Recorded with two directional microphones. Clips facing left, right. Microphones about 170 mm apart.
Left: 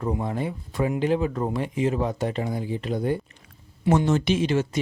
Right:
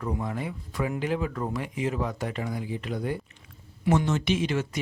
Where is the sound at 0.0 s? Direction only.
30° left (ahead or behind).